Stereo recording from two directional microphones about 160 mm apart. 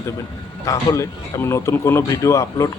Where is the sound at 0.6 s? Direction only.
20° left (ahead or behind).